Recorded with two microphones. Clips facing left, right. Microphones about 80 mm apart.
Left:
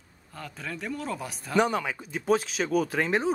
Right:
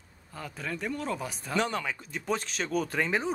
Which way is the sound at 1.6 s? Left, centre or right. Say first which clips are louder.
Left 5 dB; centre.